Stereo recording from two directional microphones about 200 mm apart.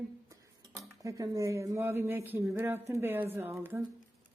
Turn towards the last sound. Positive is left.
turn(degrees=-15)  # may be behind; listen again after turning